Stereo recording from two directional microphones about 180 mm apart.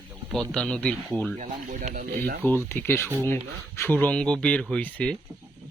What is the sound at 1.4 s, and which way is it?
Speech, 45° right (ahead or behind).